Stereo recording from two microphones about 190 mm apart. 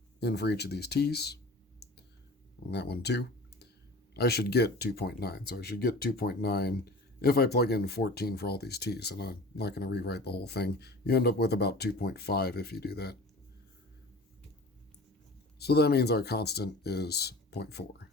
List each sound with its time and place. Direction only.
0.2 s speech: 60° left (ahead or behind)
2.6 s speech: 60° left (ahead or behind)
15.5 s speech: 60° left (ahead or behind)